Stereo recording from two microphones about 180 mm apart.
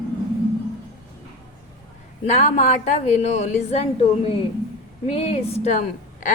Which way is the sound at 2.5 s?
40° left (ahead or behind).